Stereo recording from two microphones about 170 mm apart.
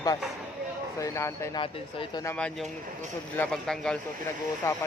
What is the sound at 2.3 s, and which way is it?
Speech, 5° left (ahead or behind).